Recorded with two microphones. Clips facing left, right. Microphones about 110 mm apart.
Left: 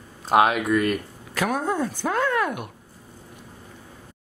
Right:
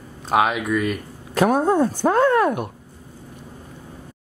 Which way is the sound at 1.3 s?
35° right (ahead or behind).